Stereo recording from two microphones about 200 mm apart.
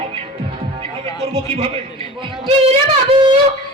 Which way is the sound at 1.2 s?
30° right (ahead or behind).